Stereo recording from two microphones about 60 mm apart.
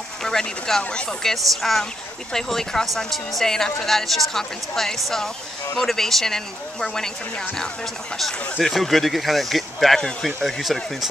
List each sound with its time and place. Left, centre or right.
0.2 s a woman's voice: centre